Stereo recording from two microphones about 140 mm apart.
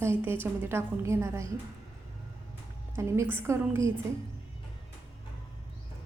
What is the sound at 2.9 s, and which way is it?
Speech, 20° right (ahead or behind).